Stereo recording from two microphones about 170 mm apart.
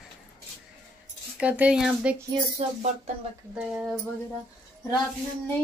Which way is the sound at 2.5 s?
35° right (ahead or behind).